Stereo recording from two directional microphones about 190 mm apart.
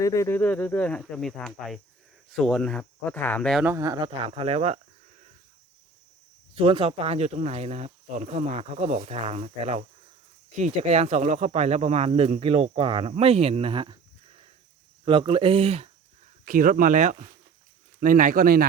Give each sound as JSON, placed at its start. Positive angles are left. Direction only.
{"t": 0.0, "sound": "speech", "side_deg": 15}
{"t": 3.6, "sound": "speech", "side_deg": -15}
{"t": 6.5, "sound": "speech", "side_deg": -30}
{"t": 15.0, "sound": "speech", "side_deg": -25}
{"t": 16.5, "sound": "speech", "side_deg": -45}